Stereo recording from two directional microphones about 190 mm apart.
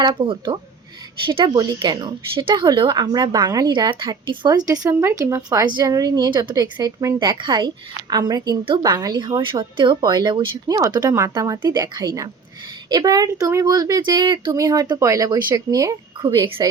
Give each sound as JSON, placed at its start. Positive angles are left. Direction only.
{"t": 0.0, "sound": "a woman's voice", "side_deg": -25}